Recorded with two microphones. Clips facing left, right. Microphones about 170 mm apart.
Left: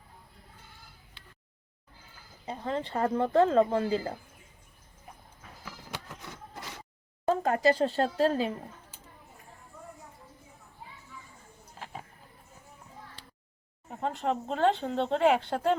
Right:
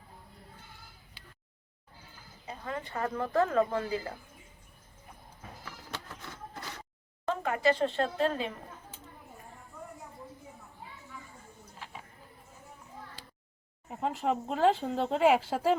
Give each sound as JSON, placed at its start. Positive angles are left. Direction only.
{"t": 2.5, "sound": "speech", "side_deg": 30}
{"t": 5.6, "sound": "music", "side_deg": 10}
{"t": 7.3, "sound": "speech", "side_deg": 40}
{"t": 13.9, "sound": "speech", "side_deg": -5}